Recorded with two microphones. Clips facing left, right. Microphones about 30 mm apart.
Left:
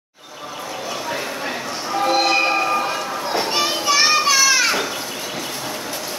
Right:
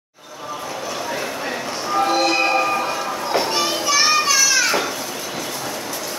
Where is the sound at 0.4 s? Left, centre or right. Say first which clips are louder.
Right 1 dB; centre.